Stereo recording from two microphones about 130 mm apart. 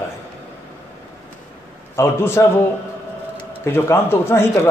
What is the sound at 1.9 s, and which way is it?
Speech, 20° left (ahead or behind).